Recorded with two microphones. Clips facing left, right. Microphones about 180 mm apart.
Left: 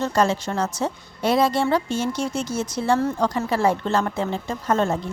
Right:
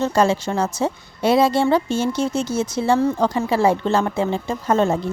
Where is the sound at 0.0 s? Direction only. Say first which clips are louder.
Right 3 dB; 25° right (ahead or behind).